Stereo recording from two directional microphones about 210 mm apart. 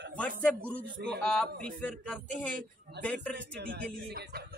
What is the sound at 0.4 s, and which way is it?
A man's voice, 5° left (ahead or behind).